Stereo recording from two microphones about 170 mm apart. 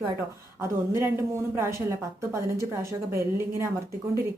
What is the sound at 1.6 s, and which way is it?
Speech, 15° right (ahead or behind).